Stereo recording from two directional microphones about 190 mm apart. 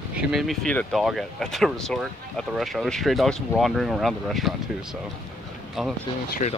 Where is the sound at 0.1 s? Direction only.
5° right (ahead or behind).